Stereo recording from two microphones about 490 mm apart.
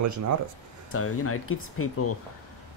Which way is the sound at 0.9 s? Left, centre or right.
Left.